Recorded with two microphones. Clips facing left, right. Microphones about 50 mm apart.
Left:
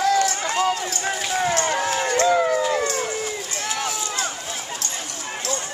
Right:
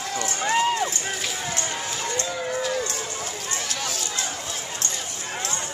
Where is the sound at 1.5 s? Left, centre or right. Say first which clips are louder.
Left 8 dB; left.